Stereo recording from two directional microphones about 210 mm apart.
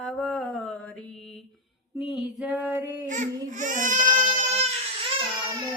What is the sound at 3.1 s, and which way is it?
Speech, 35° right (ahead or behind).